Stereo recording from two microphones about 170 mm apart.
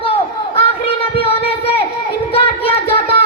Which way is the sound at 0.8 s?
35° left (ahead or behind).